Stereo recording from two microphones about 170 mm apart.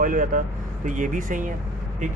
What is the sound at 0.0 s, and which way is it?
A man's voice, 50° right (ahead or behind).